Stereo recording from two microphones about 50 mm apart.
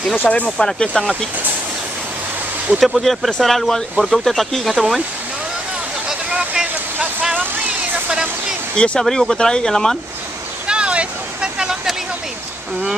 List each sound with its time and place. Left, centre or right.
0.3 s speech: centre
2.8 s speech: centre
6.3 s a sound: right
8.7 s speech: centre
9.0 s speech: centre
10.7 s vehicle: right